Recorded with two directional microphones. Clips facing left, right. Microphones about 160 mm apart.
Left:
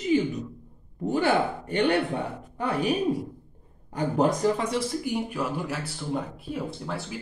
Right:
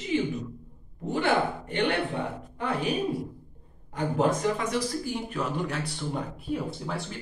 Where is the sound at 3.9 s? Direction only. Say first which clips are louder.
Left 2 dB; 40° left (ahead or behind).